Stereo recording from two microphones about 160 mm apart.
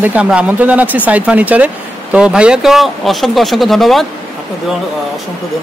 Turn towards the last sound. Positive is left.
turn(degrees=0)  # may be behind; listen again after turning